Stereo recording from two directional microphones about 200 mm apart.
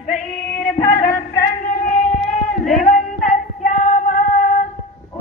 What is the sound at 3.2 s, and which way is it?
Music, 40° left (ahead or behind).